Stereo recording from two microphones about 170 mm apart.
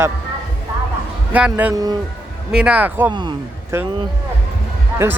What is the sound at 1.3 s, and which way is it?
Speech, 10° right (ahead or behind).